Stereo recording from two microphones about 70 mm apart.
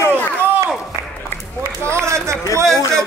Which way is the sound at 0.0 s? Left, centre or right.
Right.